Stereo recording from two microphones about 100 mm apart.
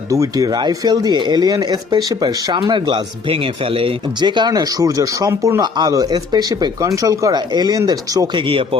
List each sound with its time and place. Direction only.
0.1 s speech: 35° right (ahead or behind); by 3.9 s 65° right (ahead or behind)
4.2 s speech: 50° right (ahead or behind)
8.4 s speech: 60° right (ahead or behind)